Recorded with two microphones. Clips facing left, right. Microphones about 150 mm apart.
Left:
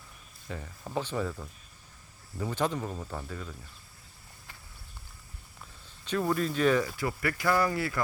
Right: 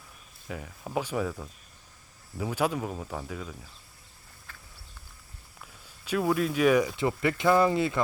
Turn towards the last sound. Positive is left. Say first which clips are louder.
# right 5 dB
turn(degrees=-20)  # may be behind; listen again after turning